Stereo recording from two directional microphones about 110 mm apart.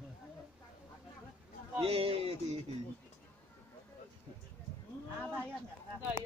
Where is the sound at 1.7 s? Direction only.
60° right (ahead or behind).